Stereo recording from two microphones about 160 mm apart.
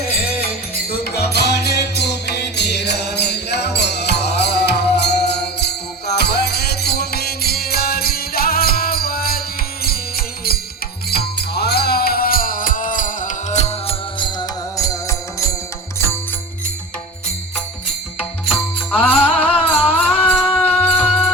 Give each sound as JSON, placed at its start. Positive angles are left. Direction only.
{"t": 0.9, "sound": "music", "side_deg": 75}
{"t": 1.3, "sound": "music", "side_deg": 90}
{"t": 11.1, "sound": "music", "side_deg": 85}
{"t": 18.4, "sound": "music", "side_deg": 0}